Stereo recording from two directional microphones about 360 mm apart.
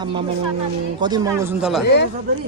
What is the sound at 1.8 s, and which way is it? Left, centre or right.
Speech, left.